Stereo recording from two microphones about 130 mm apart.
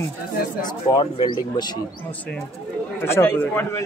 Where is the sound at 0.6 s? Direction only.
35° left (ahead or behind).